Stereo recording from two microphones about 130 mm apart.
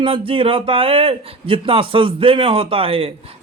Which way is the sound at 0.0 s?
45° right (ahead or behind).